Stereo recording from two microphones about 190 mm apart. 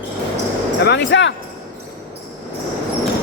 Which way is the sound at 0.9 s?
70° left (ahead or behind).